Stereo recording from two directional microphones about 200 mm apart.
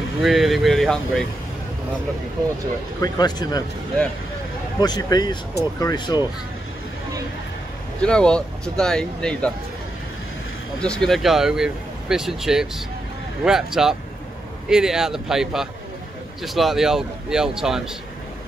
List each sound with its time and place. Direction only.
0.2 s speech: centre (ahead or behind)
3.0 s a man's voice: 20° left (ahead or behind)
4.7 s a man's voice: 20° left (ahead or behind)
8.0 s speech: 5° left (ahead or behind)
10.8 s speech: 5° left (ahead or behind)